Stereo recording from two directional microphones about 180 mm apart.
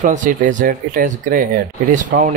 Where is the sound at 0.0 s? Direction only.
45° right (ahead or behind).